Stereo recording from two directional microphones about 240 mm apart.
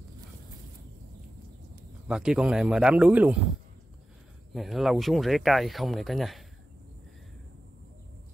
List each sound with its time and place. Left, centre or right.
2.0 s speech: centre
4.6 s speech: centre